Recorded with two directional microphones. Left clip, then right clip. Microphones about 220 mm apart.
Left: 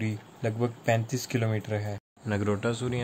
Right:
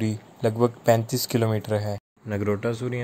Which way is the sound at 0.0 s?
15° right (ahead or behind).